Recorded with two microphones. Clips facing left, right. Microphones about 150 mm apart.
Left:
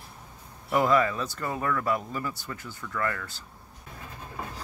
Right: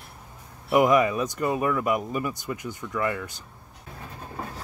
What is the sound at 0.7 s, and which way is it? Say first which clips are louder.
Speech: right 4 dB; 15° right (ahead or behind).